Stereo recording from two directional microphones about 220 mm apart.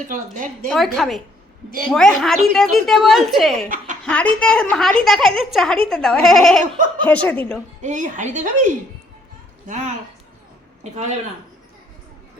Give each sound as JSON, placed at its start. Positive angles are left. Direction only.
{"t": 0.1, "sound": "a woman's voice", "side_deg": -35}
{"t": 0.7, "sound": "a woman's voice", "side_deg": 0}
{"t": 7.8, "sound": "a woman's voice", "side_deg": -35}